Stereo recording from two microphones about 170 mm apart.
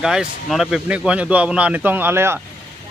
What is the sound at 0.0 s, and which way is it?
A man's voice, 5° right (ahead or behind).